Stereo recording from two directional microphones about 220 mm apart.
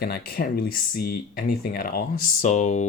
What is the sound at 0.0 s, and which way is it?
Speech, 45° left (ahead or behind).